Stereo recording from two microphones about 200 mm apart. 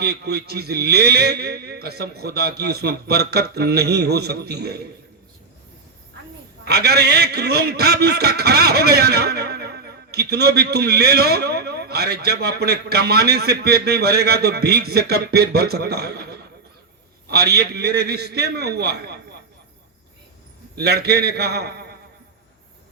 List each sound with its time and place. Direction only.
0.0 s a man's voice: 55° right (ahead or behind)
6.7 s a man's voice: 55° right (ahead or behind)
17.2 s a man's voice: 55° right (ahead or behind)
20.7 s a man's voice: 50° right (ahead or behind)